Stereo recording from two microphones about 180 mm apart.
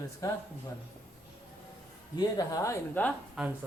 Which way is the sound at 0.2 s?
20° left (ahead or behind).